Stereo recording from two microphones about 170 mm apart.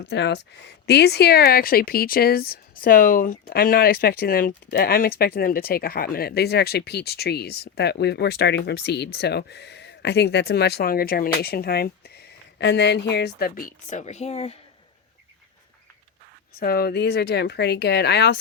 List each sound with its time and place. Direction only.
0.0 s speech: 90° left; by 14.6 s 35° left (ahead or behind)
16.5 s speech: 65° left (ahead or behind)